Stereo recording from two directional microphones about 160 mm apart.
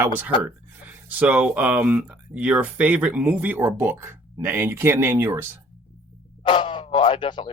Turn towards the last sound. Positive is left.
turn(degrees=30)  # may be behind; listen again after turning